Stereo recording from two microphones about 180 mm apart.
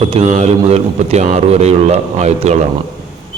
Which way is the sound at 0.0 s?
35° right (ahead or behind).